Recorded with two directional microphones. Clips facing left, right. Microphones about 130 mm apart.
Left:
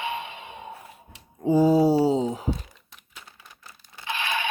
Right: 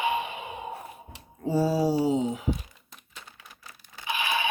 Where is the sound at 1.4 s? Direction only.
20° left (ahead or behind); by 2.5 s 35° left (ahead or behind).